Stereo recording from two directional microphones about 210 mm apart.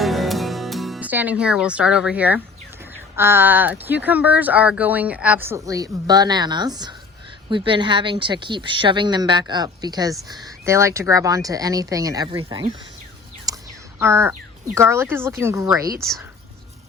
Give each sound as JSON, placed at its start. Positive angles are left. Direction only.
{"t": 0.0, "sound": "music", "side_deg": 0}
{"t": 3.2, "sound": "a woman's voice", "side_deg": -10}
{"t": 13.5, "sound": "a sound", "side_deg": -15}
{"t": 14.0, "sound": "speech", "side_deg": -10}